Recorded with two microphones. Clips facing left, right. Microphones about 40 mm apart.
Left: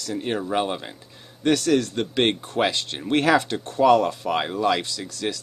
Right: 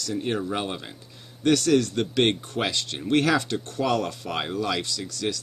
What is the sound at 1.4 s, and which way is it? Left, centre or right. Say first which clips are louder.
A man's voice: even; left.